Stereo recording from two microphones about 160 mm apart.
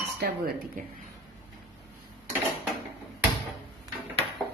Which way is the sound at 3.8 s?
35° right (ahead or behind).